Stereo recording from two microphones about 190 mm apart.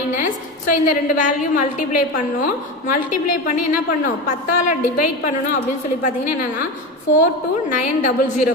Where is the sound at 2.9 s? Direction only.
45° left (ahead or behind).